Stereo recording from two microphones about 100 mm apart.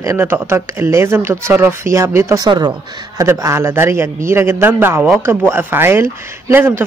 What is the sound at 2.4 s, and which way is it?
Speech, 45° right (ahead or behind).